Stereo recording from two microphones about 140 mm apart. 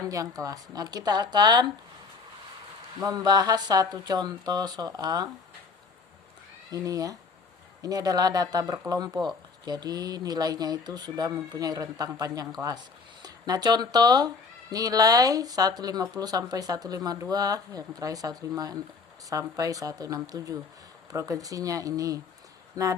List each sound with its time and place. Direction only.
0.0 s speech: 25° right (ahead or behind)
3.0 s speech: 25° right (ahead or behind)
6.7 s speech: 25° right (ahead or behind)